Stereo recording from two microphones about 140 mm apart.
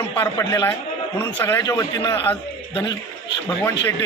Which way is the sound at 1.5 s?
30° left (ahead or behind).